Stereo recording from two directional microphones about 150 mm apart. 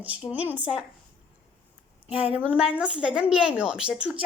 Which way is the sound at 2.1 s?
10° right (ahead or behind).